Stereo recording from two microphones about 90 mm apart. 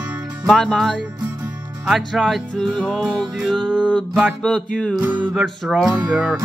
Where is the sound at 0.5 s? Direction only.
5° left (ahead or behind).